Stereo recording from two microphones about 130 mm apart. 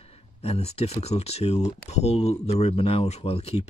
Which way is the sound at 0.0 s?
50° left (ahead or behind).